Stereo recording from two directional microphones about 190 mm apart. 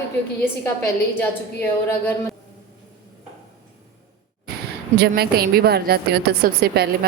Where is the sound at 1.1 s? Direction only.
10° left (ahead or behind).